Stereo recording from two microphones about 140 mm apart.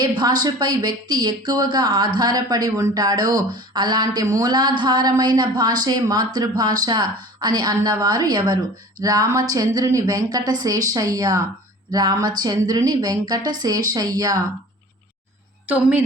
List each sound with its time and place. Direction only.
0.0 s speech: 30° right (ahead or behind)
15.6 s a woman's voice: 10° right (ahead or behind)